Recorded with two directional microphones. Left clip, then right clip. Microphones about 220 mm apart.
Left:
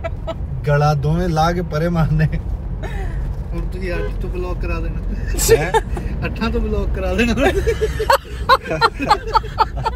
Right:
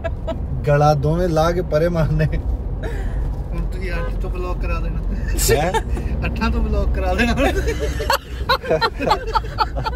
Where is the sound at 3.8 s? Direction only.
Centre (ahead or behind).